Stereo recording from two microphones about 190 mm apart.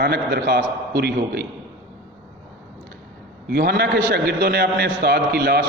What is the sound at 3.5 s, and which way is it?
A man's voice, 55° right (ahead or behind).